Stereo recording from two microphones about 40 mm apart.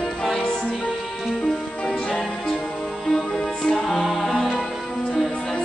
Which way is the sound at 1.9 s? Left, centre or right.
Left.